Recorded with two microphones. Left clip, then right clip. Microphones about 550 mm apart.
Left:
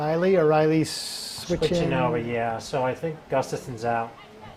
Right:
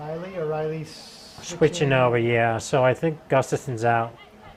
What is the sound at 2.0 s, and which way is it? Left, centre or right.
Speech, right.